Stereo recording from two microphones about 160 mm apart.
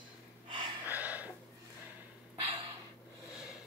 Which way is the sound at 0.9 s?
10° right (ahead or behind).